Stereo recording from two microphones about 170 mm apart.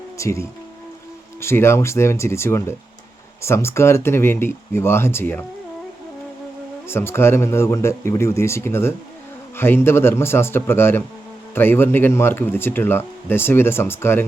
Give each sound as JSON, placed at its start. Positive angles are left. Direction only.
{"t": 0.2, "sound": "speech", "side_deg": 15}
{"t": 6.8, "sound": "speech", "side_deg": 15}